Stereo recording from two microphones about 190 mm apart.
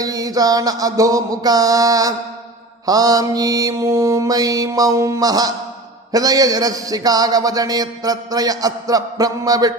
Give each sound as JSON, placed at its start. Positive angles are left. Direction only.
{"t": 0.0, "sound": "a man's voice", "side_deg": -20}